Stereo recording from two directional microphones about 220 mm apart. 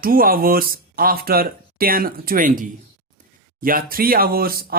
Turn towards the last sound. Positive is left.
turn(degrees=-45)  # may be behind; listen again after turning